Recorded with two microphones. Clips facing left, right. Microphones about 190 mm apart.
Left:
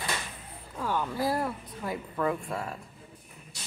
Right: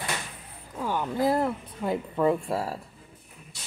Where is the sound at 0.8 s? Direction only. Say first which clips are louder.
Right 3 dB; 15° right (ahead or behind); by 2.8 s 35° right (ahead or behind).